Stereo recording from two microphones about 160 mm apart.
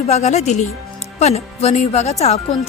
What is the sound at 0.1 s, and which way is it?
A woman's voice, 45° left (ahead or behind).